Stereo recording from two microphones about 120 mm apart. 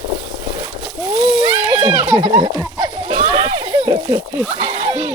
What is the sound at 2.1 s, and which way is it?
Speech, 35° right (ahead or behind).